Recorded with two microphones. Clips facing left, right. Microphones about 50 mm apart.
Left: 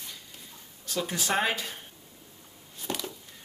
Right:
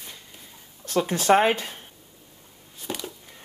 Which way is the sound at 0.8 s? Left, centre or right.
Right.